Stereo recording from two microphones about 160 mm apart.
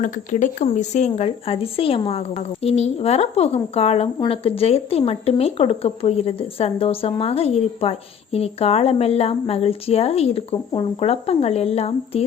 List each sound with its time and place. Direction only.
0.0 s speech: 55° left (ahead or behind)